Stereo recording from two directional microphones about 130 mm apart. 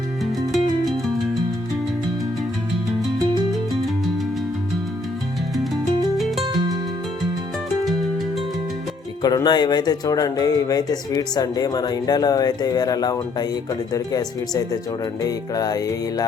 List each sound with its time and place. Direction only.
9.2 s speech: 30° left (ahead or behind)